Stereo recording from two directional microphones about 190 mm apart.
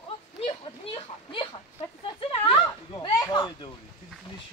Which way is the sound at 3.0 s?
25° left (ahead or behind).